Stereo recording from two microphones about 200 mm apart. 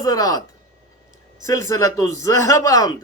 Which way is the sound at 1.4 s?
15° left (ahead or behind).